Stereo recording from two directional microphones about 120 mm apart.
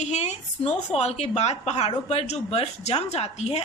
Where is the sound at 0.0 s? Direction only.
75° left (ahead or behind).